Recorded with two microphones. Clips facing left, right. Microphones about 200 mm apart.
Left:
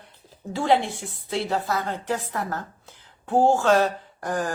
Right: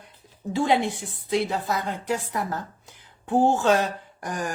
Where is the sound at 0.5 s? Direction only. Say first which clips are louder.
Even; 15° right (ahead or behind).